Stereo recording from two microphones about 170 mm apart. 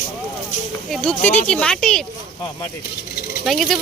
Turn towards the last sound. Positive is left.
turn(degrees=0)  # may be behind; listen again after turning